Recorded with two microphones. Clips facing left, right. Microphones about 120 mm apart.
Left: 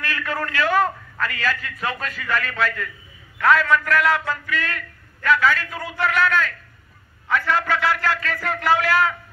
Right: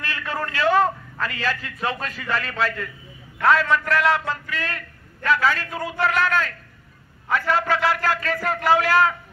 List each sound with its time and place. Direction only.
0.0 s a man's voice: 25° right (ahead or behind)